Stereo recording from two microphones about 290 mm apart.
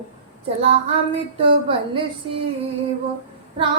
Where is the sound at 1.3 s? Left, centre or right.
Centre.